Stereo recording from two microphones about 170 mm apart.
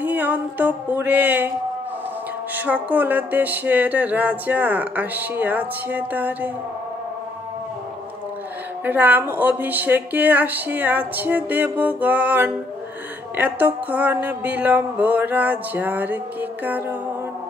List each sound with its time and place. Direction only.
0.0 s music: 10° right (ahead or behind)
2.5 s music: 10° right (ahead or behind)
8.8 s music: 10° right (ahead or behind)